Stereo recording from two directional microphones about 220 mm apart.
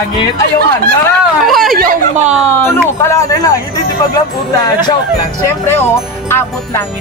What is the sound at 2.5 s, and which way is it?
Speech, 10° left (ahead or behind).